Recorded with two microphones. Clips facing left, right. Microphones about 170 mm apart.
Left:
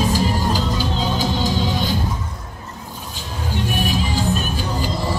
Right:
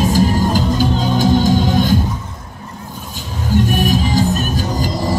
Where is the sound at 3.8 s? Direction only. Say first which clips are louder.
Right 6 dB; 40° right (ahead or behind).